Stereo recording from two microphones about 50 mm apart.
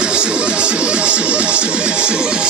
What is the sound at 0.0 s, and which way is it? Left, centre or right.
Music, centre.